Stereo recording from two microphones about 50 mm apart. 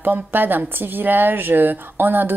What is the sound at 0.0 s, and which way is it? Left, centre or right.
A woman's voice, right.